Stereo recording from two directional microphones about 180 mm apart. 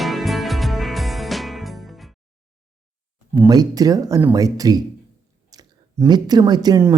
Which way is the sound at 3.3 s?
15° right (ahead or behind).